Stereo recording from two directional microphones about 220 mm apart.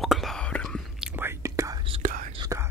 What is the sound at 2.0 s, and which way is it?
Whispering, 40° right (ahead or behind).